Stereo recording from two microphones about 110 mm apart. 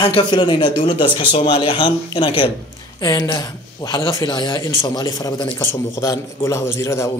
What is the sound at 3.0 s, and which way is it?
A man's voice, 35° left (ahead or behind).